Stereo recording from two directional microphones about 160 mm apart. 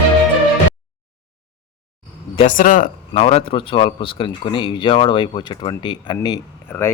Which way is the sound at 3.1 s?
40° left (ahead or behind).